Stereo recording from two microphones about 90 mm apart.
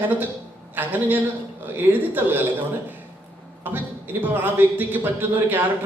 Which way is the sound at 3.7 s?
20° right (ahead or behind).